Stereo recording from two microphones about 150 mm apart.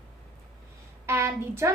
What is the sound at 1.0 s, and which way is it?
Speech, 15° right (ahead or behind).